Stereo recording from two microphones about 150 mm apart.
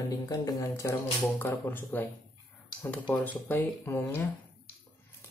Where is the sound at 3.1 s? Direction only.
10° left (ahead or behind).